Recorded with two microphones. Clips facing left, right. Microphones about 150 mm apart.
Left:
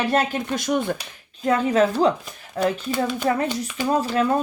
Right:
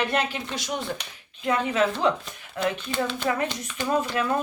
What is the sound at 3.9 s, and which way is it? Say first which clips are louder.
Speech: left 4 dB; 30° left (ahead or behind).